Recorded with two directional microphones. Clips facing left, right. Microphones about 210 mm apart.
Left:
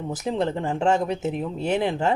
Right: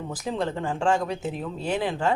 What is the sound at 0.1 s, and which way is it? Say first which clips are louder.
Speech: left 4 dB; 25° left (ahead or behind).